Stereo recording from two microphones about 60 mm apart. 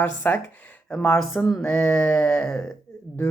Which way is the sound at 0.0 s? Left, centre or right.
Left.